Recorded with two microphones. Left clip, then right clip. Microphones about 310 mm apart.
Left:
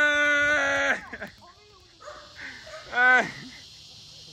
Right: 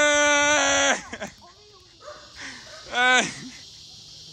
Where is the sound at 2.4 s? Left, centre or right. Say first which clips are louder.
Even; centre.